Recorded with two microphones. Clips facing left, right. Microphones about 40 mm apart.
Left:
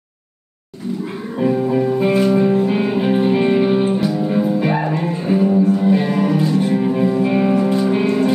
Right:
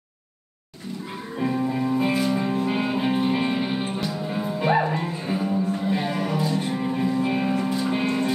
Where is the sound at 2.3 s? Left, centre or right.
Left.